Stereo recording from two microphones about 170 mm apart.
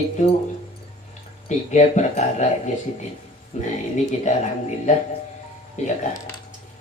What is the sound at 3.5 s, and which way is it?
Speech, 40° left (ahead or behind).